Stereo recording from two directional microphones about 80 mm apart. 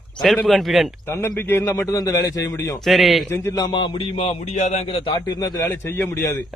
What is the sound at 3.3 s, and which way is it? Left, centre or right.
Speech, left.